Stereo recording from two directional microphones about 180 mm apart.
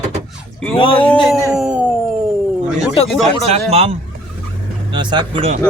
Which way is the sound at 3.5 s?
35° right (ahead or behind).